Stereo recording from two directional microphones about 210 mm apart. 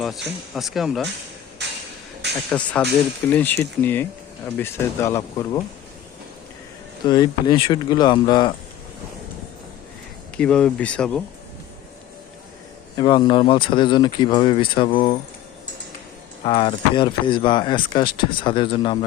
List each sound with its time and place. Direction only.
0.5 s speech: centre (ahead or behind)
2.5 s speech: 5° left (ahead or behind)
7.0 s speech: 20° left (ahead or behind)
10.3 s speech: 5° left (ahead or behind)
13.0 s speech: 20° left (ahead or behind)
16.4 s speech: 25° left (ahead or behind)